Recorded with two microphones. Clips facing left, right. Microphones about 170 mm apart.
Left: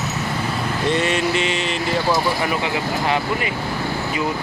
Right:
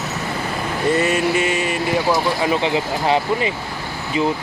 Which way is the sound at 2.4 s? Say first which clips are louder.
Right 3 dB; 25° right (ahead or behind).